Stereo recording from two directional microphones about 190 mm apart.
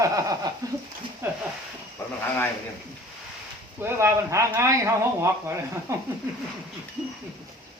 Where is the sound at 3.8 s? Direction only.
15° right (ahead or behind).